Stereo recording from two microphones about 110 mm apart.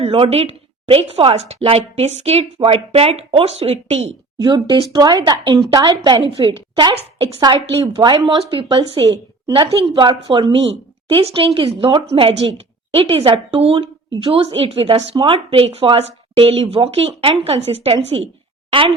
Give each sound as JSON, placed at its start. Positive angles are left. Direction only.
{"t": 0.0, "sound": "a woman's voice", "side_deg": -65}
{"t": 4.4, "sound": "a woman's voice", "side_deg": -40}
{"t": 6.9, "sound": "a woman's voice", "side_deg": -60}
{"t": 7.4, "sound": "a woman's voice", "side_deg": -50}
{"t": 9.5, "sound": "speech", "side_deg": -55}
{"t": 11.1, "sound": "a woman's voice", "side_deg": -60}
{"t": 15.1, "sound": "a woman's voice", "side_deg": -55}